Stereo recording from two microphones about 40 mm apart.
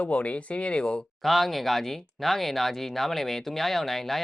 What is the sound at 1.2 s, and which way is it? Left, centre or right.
Speech, centre.